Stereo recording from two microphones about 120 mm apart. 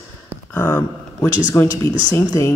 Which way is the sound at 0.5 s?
15° left (ahead or behind).